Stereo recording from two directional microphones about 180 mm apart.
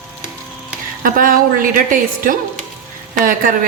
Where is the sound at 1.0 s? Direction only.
50° right (ahead or behind).